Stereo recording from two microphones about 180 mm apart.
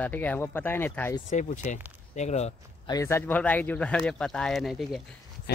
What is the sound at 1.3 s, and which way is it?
Speech, 45° left (ahead or behind).